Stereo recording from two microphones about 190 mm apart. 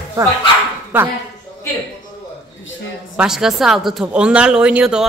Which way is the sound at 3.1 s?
5° right (ahead or behind).